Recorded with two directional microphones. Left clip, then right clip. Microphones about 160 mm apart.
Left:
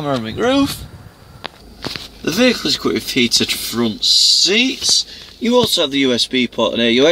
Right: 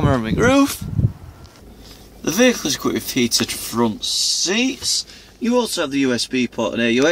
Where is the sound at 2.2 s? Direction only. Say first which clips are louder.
Left 1 dB; centre (ahead or behind).